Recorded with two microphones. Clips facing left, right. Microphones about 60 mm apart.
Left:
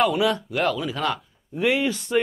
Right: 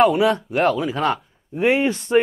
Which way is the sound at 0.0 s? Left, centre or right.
Right.